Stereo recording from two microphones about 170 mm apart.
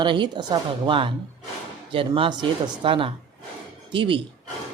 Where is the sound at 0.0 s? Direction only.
25° right (ahead or behind).